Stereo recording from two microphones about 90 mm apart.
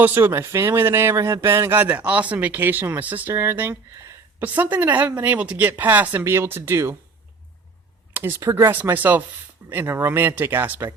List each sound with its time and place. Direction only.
0.0 s speech: 25° right (ahead or behind)
8.1 s speech: 30° right (ahead or behind)